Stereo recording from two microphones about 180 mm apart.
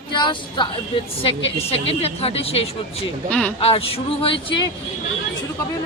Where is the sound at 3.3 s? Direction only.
5° left (ahead or behind).